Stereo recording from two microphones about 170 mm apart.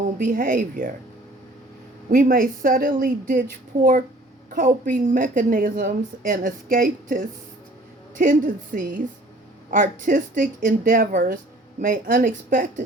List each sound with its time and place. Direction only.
0.2 s a woman's voice: 55° right (ahead or behind)
2.0 s a woman's voice: 55° right (ahead or behind)
4.5 s a woman's voice: 50° right (ahead or behind)
8.2 s a woman's voice: 50° right (ahead or behind)